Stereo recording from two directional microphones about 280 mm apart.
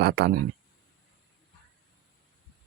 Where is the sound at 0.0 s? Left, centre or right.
Right.